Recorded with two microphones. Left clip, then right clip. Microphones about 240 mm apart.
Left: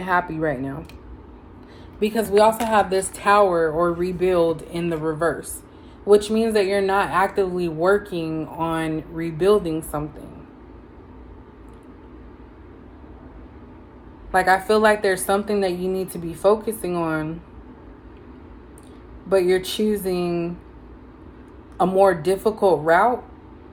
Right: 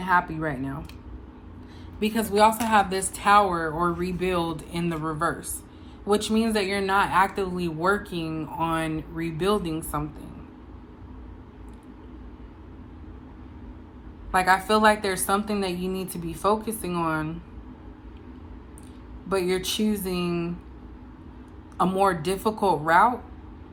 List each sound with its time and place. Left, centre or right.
0.0 s speech: centre
2.0 s speech: centre
14.3 s speech: centre
19.3 s speech: centre
21.8 s speech: centre